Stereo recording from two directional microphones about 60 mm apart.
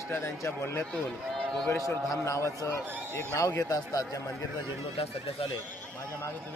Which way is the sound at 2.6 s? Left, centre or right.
Left.